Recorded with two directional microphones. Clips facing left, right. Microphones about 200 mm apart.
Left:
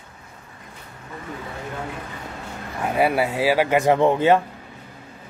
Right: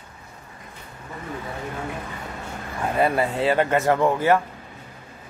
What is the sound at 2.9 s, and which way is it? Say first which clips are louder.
Speech: left 1 dB; 10° left (ahead or behind).